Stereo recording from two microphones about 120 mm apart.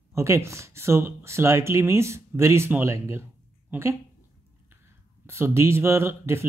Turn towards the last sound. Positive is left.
turn(degrees=-20)  # may be behind; listen again after turning